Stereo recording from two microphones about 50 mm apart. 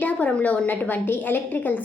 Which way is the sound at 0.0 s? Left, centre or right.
Left.